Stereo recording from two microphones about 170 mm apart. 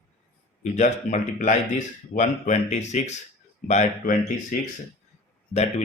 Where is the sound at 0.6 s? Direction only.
45° left (ahead or behind).